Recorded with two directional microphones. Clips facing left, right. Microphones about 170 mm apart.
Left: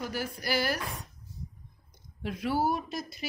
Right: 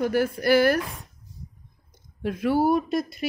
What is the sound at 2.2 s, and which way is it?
A woman's voice, 50° right (ahead or behind).